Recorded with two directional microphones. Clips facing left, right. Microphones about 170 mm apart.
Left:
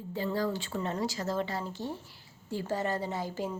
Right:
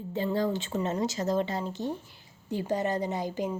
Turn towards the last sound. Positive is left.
turn(degrees=-20)  # may be behind; listen again after turning